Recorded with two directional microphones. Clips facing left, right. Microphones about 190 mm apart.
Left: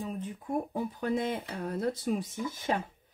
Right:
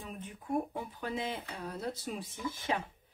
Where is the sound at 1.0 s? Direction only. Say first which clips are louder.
Left 6 dB; 50° left (ahead or behind).